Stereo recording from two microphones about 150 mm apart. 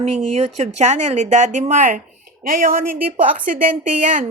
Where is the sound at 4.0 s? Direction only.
60° right (ahead or behind).